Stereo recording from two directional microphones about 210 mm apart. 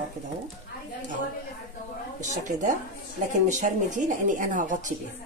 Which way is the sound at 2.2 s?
35° right (ahead or behind).